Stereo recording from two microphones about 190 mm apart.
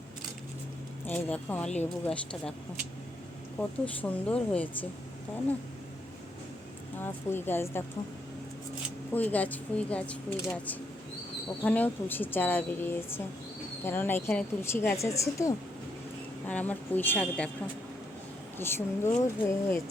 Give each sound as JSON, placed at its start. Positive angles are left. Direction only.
{"t": 1.0, "sound": "speech", "side_deg": 10}
{"t": 3.6, "sound": "speech", "side_deg": 5}
{"t": 7.0, "sound": "speech", "side_deg": 10}
{"t": 9.1, "sound": "speech", "side_deg": 10}
{"t": 18.5, "sound": "speech", "side_deg": 10}